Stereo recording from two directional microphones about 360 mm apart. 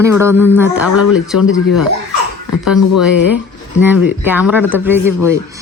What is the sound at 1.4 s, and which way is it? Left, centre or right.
Speech, left.